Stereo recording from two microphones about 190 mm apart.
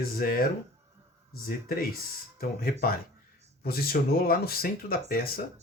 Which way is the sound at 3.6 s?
55° left (ahead or behind).